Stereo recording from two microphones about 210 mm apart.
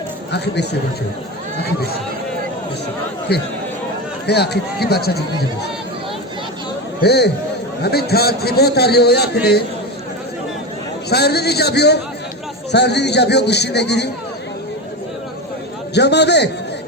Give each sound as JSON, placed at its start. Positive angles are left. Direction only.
{"t": 0.3, "sound": "a man's voice", "side_deg": 55}
{"t": 3.3, "sound": "a man's voice", "side_deg": 50}
{"t": 7.0, "sound": "a man's voice", "side_deg": 50}
{"t": 11.1, "sound": "a man's voice", "side_deg": 50}
{"t": 16.0, "sound": "a man's voice", "side_deg": 55}